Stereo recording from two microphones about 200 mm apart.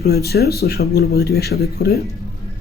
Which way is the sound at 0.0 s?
50° left (ahead or behind).